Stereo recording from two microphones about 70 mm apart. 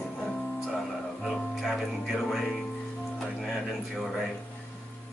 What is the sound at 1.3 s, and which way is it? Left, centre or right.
Speech, centre.